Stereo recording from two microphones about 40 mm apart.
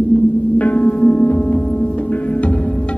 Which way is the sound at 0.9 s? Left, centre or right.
Left.